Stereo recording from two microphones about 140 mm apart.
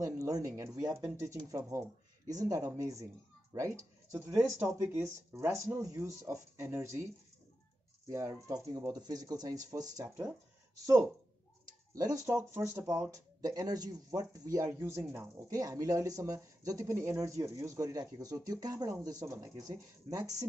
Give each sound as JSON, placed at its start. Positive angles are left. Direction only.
{"t": 0.0, "sound": "speech", "side_deg": -25}
{"t": 8.1, "sound": "speech", "side_deg": -20}
{"t": 11.9, "sound": "speech", "side_deg": -25}